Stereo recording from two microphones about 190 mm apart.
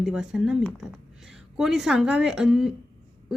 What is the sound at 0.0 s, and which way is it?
A woman's voice, 5° right (ahead or behind).